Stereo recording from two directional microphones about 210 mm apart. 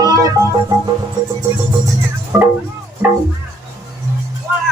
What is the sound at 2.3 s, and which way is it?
Speech, 5° right (ahead or behind).